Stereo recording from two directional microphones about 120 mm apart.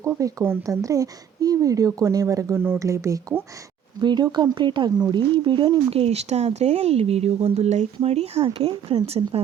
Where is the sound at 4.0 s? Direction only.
40° right (ahead or behind).